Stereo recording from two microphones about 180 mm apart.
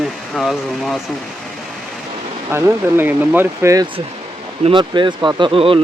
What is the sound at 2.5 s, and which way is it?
Speech, 10° right (ahead or behind).